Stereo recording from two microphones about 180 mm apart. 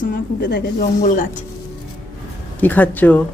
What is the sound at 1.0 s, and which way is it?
Speech, 45° left (ahead or behind).